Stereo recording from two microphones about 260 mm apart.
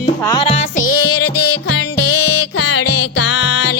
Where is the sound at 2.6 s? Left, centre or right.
Left.